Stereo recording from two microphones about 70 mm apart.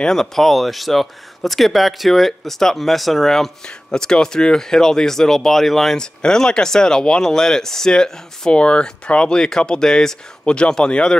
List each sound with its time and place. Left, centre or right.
0.0 s speech: centre